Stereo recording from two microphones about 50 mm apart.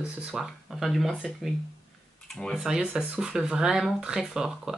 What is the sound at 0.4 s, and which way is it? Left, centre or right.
Speech, centre.